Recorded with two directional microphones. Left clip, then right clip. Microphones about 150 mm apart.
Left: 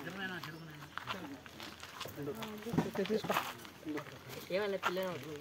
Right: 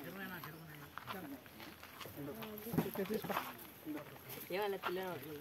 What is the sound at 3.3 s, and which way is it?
Speech, 90° left.